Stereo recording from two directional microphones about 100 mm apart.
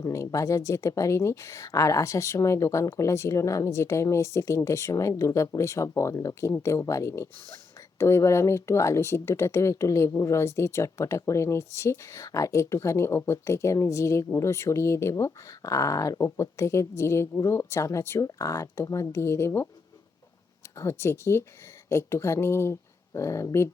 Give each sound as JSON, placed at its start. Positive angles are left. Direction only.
{"t": 0.0, "sound": "speech", "side_deg": 30}
{"t": 20.7, "sound": "speech", "side_deg": 25}